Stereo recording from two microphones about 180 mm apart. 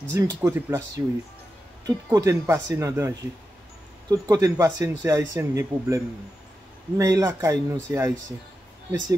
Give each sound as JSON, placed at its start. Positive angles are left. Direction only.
{"t": 0.1, "sound": "speech", "side_deg": -20}